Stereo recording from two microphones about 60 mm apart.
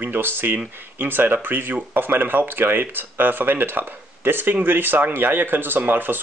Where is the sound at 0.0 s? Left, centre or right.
Right.